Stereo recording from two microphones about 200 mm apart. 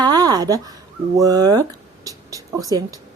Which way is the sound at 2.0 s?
15° right (ahead or behind).